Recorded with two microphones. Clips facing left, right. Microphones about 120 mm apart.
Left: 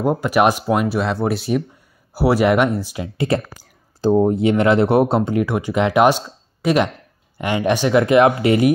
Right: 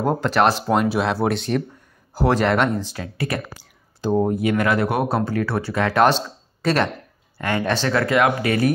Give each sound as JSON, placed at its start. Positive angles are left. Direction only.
{"t": 0.0, "sound": "speech", "side_deg": 10}